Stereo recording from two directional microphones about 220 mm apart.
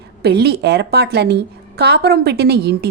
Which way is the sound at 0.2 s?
50° right (ahead or behind).